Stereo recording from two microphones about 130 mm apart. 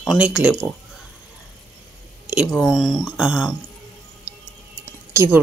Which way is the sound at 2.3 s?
5° right (ahead or behind).